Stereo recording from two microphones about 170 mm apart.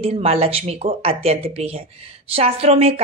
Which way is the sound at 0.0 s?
35° right (ahead or behind).